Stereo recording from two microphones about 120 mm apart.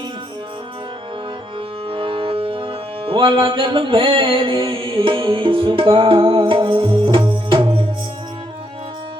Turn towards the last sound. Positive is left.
turn(degrees=-45)  # may be behind; listen again after turning